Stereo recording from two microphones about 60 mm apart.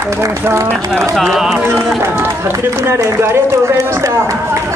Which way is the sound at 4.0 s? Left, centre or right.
Right.